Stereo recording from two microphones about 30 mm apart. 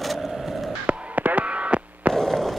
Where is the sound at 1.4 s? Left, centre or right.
Right.